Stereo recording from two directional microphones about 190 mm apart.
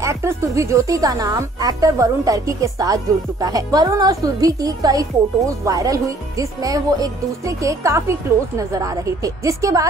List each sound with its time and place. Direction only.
0.0 s speech: 15° right (ahead or behind)